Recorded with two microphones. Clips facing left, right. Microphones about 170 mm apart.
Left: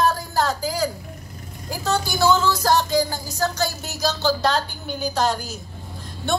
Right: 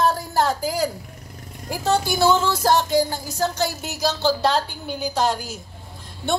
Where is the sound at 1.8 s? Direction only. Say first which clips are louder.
Right 1 dB; 25° right (ahead or behind).